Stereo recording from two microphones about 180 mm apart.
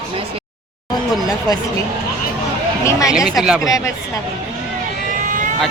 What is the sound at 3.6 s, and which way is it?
Speech, 20° left (ahead or behind).